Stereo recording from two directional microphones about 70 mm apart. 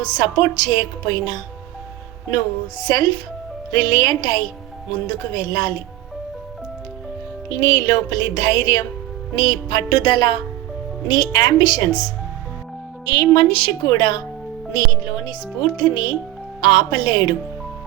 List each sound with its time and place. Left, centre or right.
0.0 s a woman's voice: left
3.7 s a woman's voice: left
7.5 s a woman's voice: left
9.3 s speech: left
11.1 s speech: left
11.3 s speech: left
13.1 s speech: left